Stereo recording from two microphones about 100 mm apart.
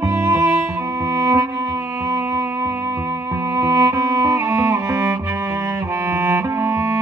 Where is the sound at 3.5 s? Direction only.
30° right (ahead or behind).